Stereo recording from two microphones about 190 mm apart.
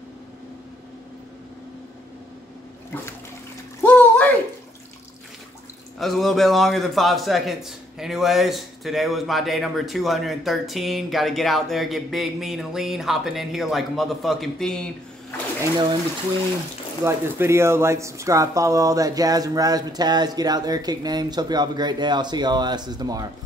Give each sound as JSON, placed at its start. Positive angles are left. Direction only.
{"t": 3.8, "sound": "a sound", "side_deg": 5}
{"t": 5.9, "sound": "a man's voice", "side_deg": 0}
{"t": 17.0, "sound": "speech", "side_deg": -15}